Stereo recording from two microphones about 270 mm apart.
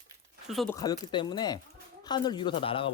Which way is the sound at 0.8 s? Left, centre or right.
Centre.